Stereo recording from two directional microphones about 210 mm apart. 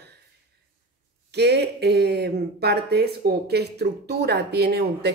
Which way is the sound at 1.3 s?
50° right (ahead or behind).